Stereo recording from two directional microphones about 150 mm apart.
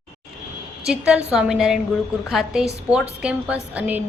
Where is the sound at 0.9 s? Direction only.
5° right (ahead or behind).